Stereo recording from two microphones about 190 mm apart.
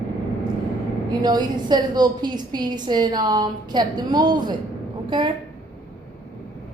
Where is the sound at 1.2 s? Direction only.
20° right (ahead or behind).